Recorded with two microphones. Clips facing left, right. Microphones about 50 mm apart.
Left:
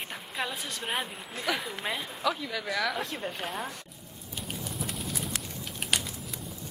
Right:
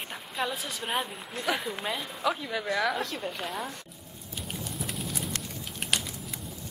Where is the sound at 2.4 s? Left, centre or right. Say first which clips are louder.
Right 2 dB; centre.